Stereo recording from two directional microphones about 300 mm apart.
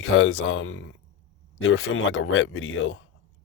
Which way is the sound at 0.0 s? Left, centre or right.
Left.